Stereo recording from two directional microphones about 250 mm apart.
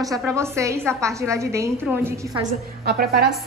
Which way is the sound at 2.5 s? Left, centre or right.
Right.